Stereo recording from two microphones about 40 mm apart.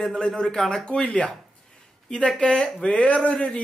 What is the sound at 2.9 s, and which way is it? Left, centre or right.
Speech, left.